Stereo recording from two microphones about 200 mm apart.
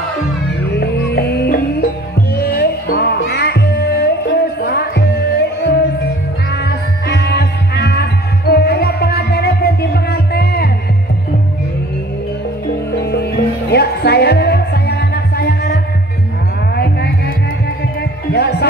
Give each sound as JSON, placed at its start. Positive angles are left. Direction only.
{"t": 0.7, "sound": "music", "side_deg": 55}
{"t": 13.0, "sound": "music", "side_deg": 55}
{"t": 18.3, "sound": "music", "side_deg": 55}